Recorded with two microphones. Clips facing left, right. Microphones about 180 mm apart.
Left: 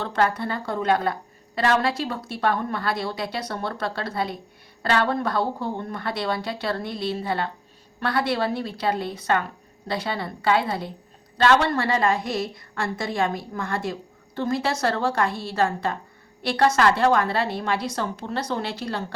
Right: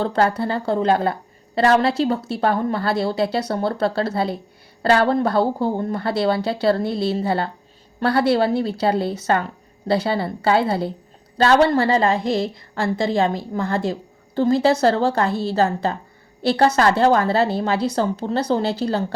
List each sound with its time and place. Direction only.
0.0 s a woman's voice: 30° right (ahead or behind)